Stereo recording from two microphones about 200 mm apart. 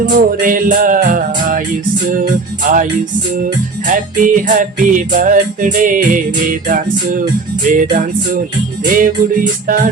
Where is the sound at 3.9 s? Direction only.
40° right (ahead or behind).